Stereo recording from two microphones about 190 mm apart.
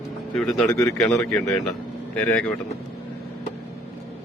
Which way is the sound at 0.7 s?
15° left (ahead or behind).